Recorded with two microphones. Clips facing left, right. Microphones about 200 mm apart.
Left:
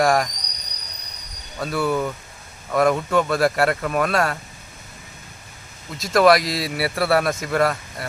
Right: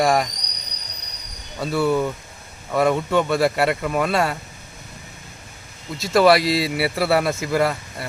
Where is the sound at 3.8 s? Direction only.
20° right (ahead or behind).